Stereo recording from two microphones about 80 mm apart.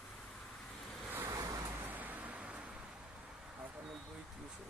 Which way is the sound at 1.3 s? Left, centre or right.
Right.